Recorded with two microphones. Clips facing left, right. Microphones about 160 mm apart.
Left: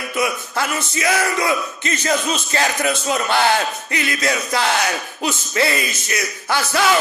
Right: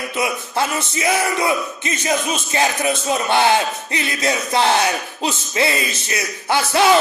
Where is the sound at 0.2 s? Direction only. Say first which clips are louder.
Even; 25° right (ahead or behind).